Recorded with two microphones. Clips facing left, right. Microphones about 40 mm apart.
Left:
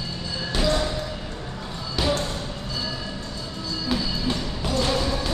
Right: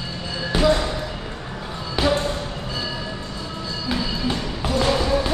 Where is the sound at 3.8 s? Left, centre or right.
Centre.